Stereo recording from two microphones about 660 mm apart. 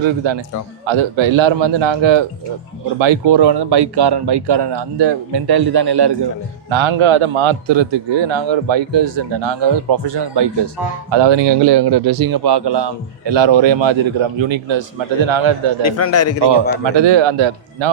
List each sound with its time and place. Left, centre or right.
0.0 s speech: right
15.8 s a man's voice: left
16.4 s speech: right